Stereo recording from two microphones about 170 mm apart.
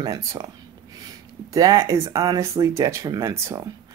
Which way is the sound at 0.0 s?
20° right (ahead or behind).